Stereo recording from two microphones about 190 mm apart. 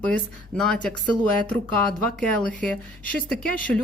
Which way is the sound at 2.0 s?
5° left (ahead or behind).